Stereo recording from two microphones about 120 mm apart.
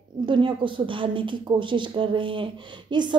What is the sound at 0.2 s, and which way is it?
A woman's voice, 40° right (ahead or behind).